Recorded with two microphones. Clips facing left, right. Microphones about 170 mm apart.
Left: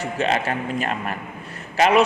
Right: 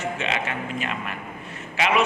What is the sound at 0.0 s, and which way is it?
A man's voice, 40° left (ahead or behind).